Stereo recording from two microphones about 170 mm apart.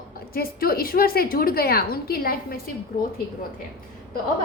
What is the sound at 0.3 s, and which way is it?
A woman's voice, 60° left (ahead or behind).